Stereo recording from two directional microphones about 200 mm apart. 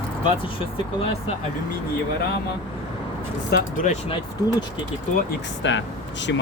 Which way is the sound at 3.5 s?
40° left (ahead or behind).